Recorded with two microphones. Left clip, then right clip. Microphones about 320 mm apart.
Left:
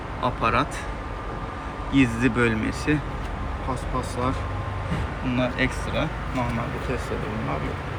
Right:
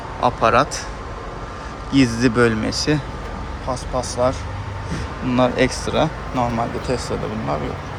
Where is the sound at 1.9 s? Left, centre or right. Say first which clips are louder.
Right 4 dB; right.